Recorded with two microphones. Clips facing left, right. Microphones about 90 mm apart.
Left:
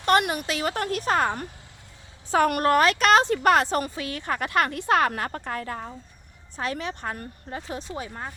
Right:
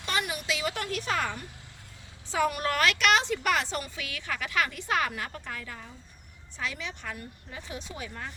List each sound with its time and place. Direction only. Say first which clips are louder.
0.0 s speech: left 10 dB; 55° left (ahead or behind)
2.7 s speech: left 6 dB; 35° left (ahead or behind)